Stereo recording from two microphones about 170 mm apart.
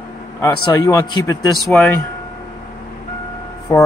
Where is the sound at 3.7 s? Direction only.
15° left (ahead or behind).